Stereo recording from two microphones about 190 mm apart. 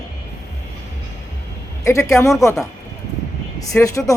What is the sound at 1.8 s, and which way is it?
Speech, 15° left (ahead or behind).